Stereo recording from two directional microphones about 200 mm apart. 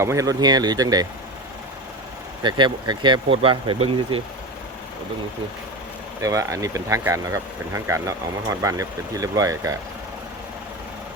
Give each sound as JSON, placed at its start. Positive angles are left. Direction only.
{"t": 0.0, "sound": "speech", "side_deg": -15}
{"t": 2.4, "sound": "speech", "side_deg": -20}
{"t": 6.2, "sound": "speech", "side_deg": -15}